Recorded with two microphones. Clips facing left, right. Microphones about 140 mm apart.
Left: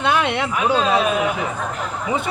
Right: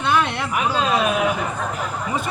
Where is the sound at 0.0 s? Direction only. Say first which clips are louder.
Left 1 dB; 65° left (ahead or behind).